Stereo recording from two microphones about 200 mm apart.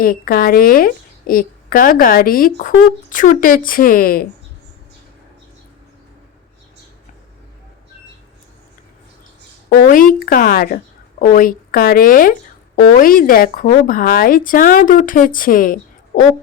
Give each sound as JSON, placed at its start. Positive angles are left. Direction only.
{"t": 0.0, "sound": "speech", "side_deg": 45}
{"t": 9.6, "sound": "speech", "side_deg": 45}